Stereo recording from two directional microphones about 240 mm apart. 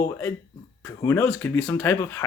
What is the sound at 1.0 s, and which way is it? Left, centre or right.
Speech, centre.